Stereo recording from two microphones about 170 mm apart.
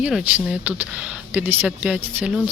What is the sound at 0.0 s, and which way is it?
Speech, 5° right (ahead or behind).